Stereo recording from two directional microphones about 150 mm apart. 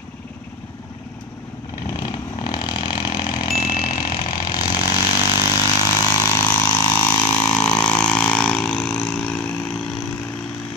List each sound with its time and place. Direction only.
1.9 s vehicle: 25° left (ahead or behind); by 9.9 s 5° left (ahead or behind)